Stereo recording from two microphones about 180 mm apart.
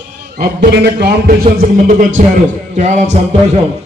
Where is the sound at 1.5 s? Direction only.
45° right (ahead or behind).